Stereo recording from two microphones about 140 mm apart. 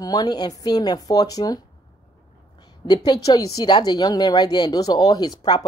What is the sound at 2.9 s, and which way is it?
Speech, 30° left (ahead or behind).